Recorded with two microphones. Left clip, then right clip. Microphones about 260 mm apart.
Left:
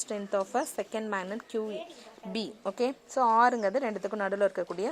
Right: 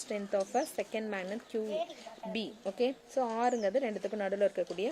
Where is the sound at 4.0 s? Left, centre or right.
Left.